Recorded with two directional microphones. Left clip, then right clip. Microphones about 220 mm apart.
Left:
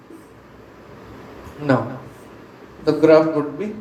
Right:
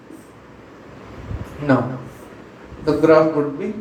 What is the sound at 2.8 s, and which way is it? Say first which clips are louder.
Speech: left 1 dB; 30° left (ahead or behind).